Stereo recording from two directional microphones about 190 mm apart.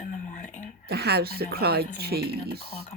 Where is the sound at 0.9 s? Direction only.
60° right (ahead or behind).